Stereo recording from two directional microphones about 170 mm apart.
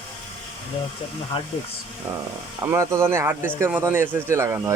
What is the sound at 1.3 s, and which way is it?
Speech, 30° left (ahead or behind).